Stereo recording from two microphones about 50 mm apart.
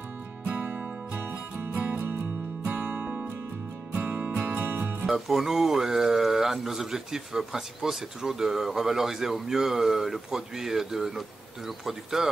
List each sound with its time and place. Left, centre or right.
0.6 s music: right
4.6 s music: right
5.0 s speech: centre